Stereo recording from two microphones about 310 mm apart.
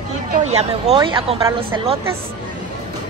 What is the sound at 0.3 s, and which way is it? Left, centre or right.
Speech, right.